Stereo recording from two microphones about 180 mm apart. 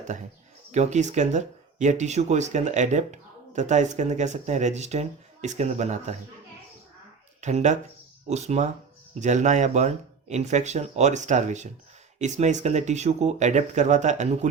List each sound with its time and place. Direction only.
0.7 s speech: 40° right (ahead or behind)
7.4 s speech: 40° right (ahead or behind)